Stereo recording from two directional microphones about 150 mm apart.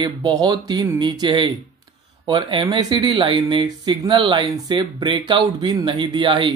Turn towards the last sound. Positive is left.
turn(degrees=-35)  # may be behind; listen again after turning